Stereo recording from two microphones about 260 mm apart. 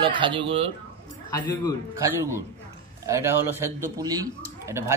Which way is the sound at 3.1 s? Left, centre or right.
Centre.